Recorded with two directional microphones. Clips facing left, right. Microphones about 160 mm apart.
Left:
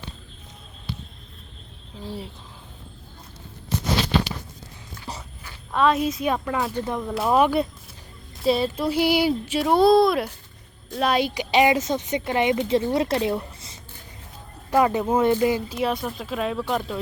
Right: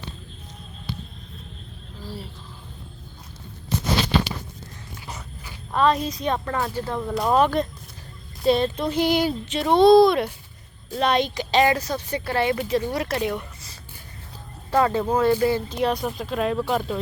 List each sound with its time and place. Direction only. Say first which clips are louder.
2.0 s speech: left 3 dB; 20° left (ahead or behind)
5.7 s speech: even; centre (ahead or behind); by 13.7 s 30° left (ahead or behind)
14.7 s speech: left 1 dB; 15° left (ahead or behind)
15.7 s speech: right 2 dB; centre (ahead or behind)